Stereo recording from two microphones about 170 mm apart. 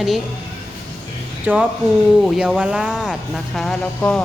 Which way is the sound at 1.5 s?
10° right (ahead or behind).